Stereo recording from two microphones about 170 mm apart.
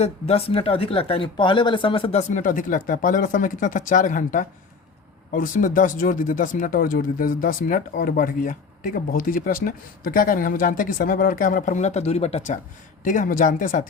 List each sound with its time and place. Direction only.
0.0 s speech: 35° left (ahead or behind)
2.3 s speech: 50° left (ahead or behind)
13.1 s speech: 50° left (ahead or behind)